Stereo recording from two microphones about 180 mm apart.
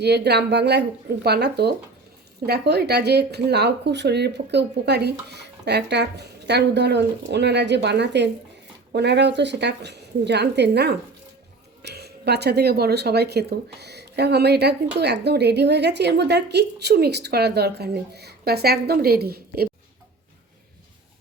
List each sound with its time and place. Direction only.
0.0 s a woman's voice: 65° right (ahead or behind)